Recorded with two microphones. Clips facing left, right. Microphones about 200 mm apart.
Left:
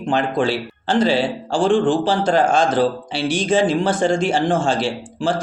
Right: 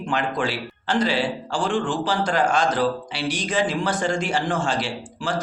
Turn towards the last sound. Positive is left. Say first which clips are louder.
# left 5 dB
turn(degrees=25)  # may be behind; listen again after turning